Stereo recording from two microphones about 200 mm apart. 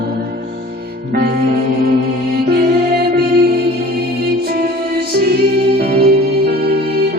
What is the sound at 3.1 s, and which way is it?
Music, 50° right (ahead or behind).